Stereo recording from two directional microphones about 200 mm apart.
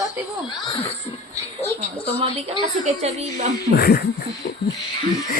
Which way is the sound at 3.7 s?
50° left (ahead or behind).